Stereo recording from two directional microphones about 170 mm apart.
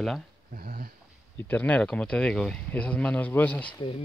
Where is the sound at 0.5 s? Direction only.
55° right (ahead or behind).